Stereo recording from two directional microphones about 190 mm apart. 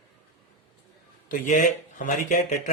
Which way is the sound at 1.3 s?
45° left (ahead or behind).